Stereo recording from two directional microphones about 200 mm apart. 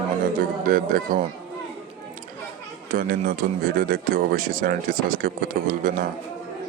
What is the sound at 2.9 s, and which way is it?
Speech, 45° right (ahead or behind).